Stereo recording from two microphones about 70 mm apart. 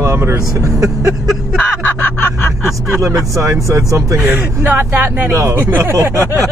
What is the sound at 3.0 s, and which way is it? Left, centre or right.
Speech, right.